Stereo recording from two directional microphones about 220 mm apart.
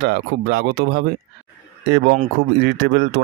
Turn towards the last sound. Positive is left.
turn(degrees=-50)  # may be behind; listen again after turning